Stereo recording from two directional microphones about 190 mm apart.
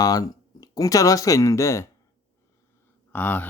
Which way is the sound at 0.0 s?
20° left (ahead or behind).